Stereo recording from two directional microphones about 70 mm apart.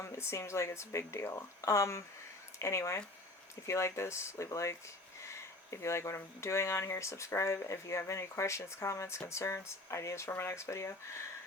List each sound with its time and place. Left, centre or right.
0.0 s speech: left